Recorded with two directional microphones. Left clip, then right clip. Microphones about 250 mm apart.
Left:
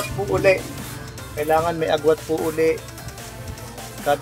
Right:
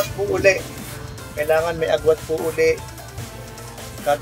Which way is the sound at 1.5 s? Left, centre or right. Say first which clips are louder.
Even; left.